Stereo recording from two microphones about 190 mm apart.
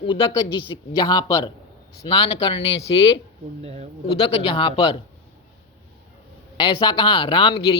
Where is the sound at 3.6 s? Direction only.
35° right (ahead or behind).